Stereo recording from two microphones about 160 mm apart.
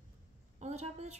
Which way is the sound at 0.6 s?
45° right (ahead or behind).